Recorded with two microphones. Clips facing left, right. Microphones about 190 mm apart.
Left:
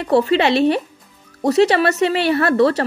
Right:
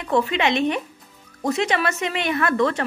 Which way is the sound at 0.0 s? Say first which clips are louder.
Left 6 dB; 35° left (ahead or behind).